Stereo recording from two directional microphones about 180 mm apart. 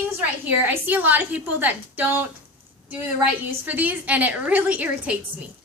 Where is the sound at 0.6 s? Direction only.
10° right (ahead or behind).